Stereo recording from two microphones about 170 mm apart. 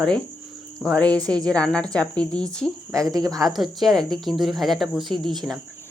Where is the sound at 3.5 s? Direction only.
Centre (ahead or behind).